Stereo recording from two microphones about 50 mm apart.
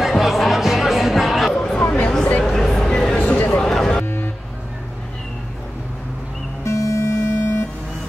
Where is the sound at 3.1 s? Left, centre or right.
Left.